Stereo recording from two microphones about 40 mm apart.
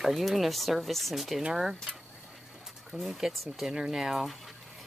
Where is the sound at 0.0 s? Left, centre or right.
Centre.